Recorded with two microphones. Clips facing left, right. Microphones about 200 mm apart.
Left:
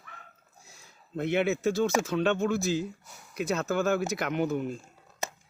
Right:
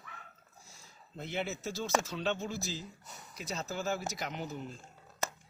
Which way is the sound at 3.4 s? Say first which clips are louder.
Left 11 dB; 60° left (ahead or behind).